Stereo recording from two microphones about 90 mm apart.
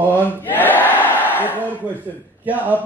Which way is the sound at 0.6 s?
20° left (ahead or behind).